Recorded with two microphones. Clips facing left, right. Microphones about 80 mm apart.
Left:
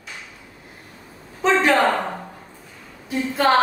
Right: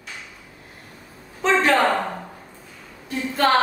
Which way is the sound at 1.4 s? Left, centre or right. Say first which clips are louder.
Left 1 dB; centre.